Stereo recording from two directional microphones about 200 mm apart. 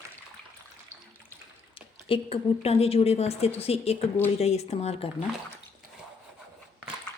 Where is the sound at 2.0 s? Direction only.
25° left (ahead or behind).